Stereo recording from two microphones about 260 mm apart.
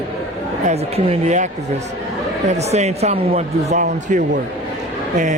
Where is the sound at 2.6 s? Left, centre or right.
Right.